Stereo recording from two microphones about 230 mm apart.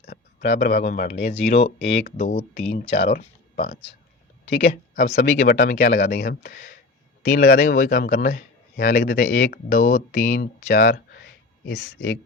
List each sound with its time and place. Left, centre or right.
0.0 s speech: left
1.3 s speech: left
1.9 s a man's voice: left
2.8 s speech: left
3.1 s speech: left
4.4 s speech: left
5.1 s a man's voice: left